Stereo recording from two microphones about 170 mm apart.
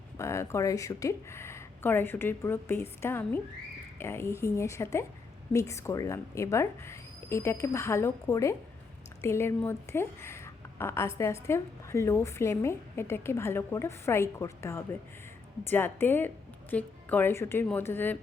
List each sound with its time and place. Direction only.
0.2 s a woman's voice: 15° left (ahead or behind)